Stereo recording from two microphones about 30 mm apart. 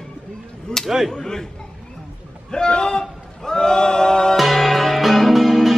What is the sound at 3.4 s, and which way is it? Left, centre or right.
Choir, centre.